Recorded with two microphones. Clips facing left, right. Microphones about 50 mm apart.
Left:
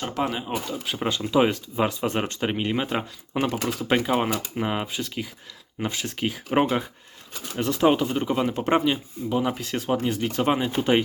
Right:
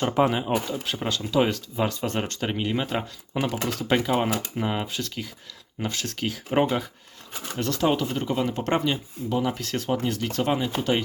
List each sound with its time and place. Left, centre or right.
0.0 s speech: centre
0.9 s speech: centre